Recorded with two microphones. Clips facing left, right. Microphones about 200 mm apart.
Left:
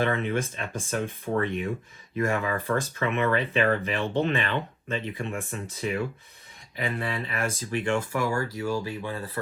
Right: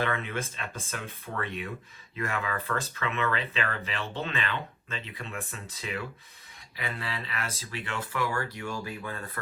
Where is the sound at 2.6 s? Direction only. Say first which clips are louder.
Left 6 dB; 15° left (ahead or behind).